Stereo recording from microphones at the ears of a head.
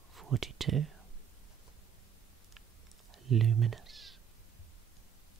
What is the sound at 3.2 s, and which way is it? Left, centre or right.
Speech, right.